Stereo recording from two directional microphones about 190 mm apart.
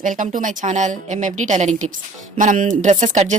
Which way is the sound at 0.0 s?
45° right (ahead or behind).